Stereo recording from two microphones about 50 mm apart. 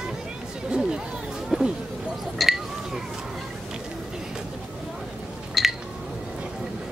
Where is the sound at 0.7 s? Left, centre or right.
Centre.